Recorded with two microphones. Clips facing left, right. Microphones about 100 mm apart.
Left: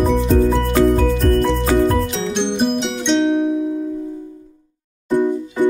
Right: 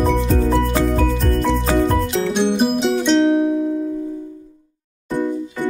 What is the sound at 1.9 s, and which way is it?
Music, 5° right (ahead or behind).